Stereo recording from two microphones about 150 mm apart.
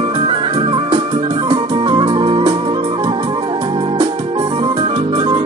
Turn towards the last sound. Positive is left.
turn(degrees=-35)  # may be behind; listen again after turning